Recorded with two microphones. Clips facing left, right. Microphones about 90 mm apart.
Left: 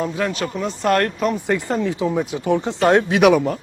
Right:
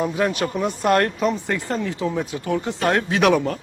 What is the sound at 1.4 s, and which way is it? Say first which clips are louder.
Speech: left 4 dB; 15° left (ahead or behind).